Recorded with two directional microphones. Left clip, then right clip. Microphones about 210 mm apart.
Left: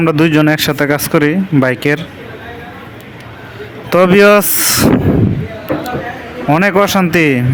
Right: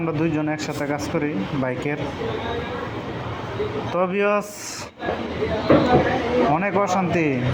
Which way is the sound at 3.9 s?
55° left (ahead or behind).